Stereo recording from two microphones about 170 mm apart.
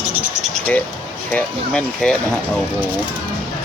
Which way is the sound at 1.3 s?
5° left (ahead or behind).